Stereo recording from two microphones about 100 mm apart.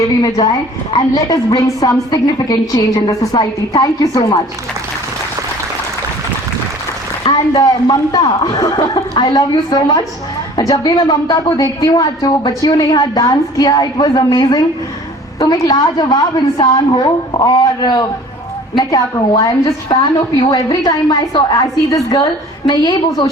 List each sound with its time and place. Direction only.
0.9 s a woman's voice: 40° left (ahead or behind)
7.3 s a woman's voice: 45° left (ahead or behind)